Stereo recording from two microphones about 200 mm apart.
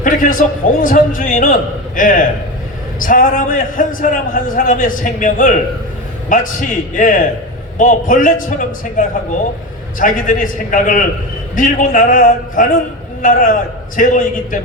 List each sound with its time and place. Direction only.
0.0 s a man's voice: 40° left (ahead or behind)